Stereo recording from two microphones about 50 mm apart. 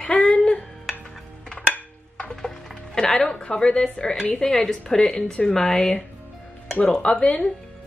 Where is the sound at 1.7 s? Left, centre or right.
Left.